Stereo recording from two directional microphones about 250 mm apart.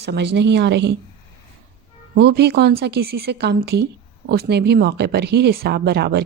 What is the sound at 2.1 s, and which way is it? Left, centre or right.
Speech, right.